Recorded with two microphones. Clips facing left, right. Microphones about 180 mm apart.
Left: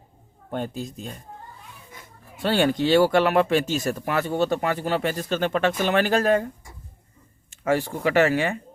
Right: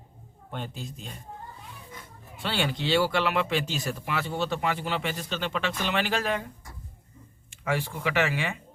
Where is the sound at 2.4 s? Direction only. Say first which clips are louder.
Left 9 dB; 45° left (ahead or behind).